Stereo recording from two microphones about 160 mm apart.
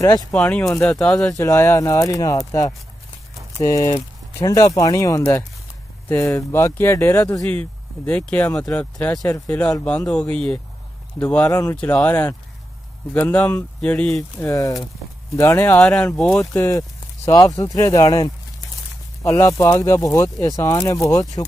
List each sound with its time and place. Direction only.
0.3 s speech: 5° left (ahead or behind)
1.4 s speech: 15° left (ahead or behind)
8.9 s speech: 20° left (ahead or behind)
14.5 s speech: 20° left (ahead or behind); by 16.6 s 5° left (ahead or behind)
16.6 s speech: 20° left (ahead or behind)